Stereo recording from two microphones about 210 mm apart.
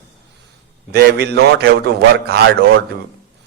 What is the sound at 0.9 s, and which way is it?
A man's voice, 50° right (ahead or behind).